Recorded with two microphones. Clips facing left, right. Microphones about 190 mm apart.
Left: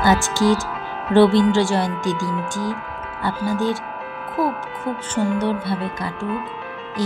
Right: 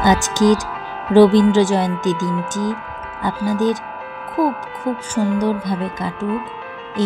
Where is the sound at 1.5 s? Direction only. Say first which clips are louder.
Right 3 dB; 20° right (ahead or behind).